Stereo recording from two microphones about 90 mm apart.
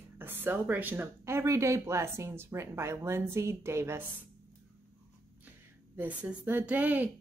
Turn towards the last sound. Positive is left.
turn(degrees=-20)  # may be behind; listen again after turning